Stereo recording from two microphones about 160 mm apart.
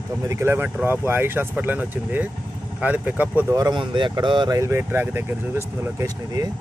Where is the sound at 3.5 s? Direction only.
25° right (ahead or behind).